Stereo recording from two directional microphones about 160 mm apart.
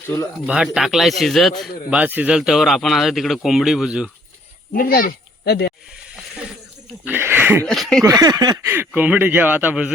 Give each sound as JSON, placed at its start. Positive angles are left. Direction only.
{"t": 0.4, "sound": "speech", "side_deg": -5}
{"t": 4.7, "sound": "speech", "side_deg": 65}
{"t": 7.0, "sound": "a sound", "side_deg": -10}
{"t": 7.6, "sound": "speech", "side_deg": 5}
{"t": 8.0, "sound": "a sound", "side_deg": -20}
{"t": 8.6, "sound": "a man's voice", "side_deg": -15}